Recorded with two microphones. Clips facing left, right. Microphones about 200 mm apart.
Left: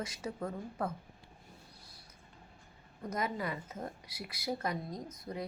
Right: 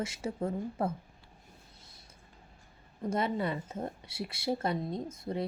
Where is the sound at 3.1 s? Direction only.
30° right (ahead or behind).